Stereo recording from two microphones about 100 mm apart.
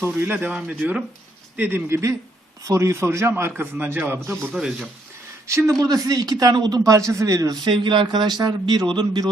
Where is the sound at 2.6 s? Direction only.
30° right (ahead or behind).